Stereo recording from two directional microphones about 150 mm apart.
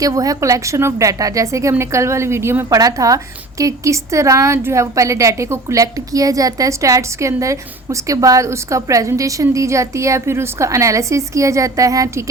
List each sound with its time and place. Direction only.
0.0 s a woman's voice: 25° right (ahead or behind)